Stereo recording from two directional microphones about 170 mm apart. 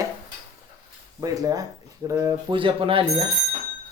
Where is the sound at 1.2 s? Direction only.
20° right (ahead or behind).